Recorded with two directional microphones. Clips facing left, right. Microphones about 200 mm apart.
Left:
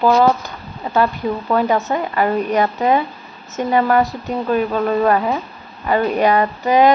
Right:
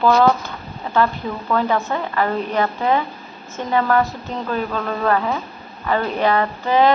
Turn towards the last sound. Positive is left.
turn(degrees=15)  # may be behind; listen again after turning